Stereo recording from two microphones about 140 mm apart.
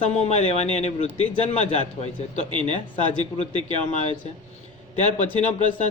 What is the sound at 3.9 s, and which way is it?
Speech, 55° left (ahead or behind).